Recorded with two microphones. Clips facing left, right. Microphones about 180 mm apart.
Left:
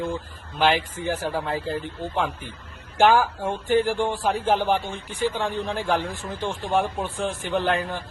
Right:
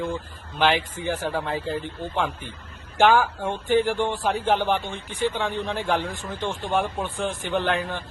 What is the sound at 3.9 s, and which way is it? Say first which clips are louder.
Speech: even; 35° left (ahead or behind).